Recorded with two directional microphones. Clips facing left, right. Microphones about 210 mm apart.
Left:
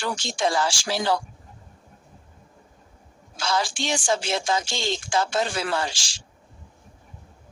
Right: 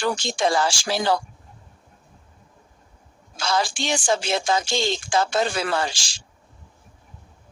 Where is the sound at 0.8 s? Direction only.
50° right (ahead or behind).